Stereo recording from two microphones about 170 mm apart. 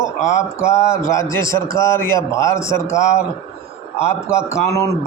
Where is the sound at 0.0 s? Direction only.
15° left (ahead or behind).